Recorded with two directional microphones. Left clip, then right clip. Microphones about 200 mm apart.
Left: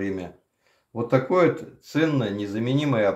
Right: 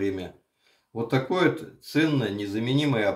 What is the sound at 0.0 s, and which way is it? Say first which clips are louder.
Speech: right 1 dB; 35° left (ahead or behind).